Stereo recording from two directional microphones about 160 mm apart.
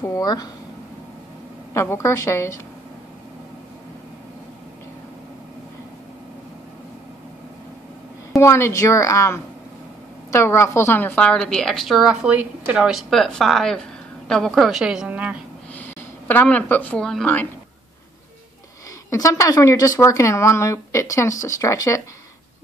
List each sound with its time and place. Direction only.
0.0 s speech: 20° left (ahead or behind)
1.7 s a woman's voice: 15° left (ahead or behind)
8.4 s a woman's voice: 15° left (ahead or behind); by 15.3 s 10° right (ahead or behind)
15.7 s speech: 10° left (ahead or behind)
19.0 s speech: 20° left (ahead or behind)